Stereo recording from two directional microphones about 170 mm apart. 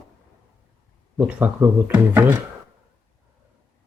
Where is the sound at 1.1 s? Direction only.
10° right (ahead or behind).